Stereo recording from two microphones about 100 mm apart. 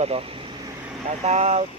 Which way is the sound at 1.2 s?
90° right.